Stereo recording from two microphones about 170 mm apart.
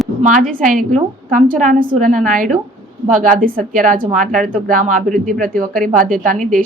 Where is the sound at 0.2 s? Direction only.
45° right (ahead or behind).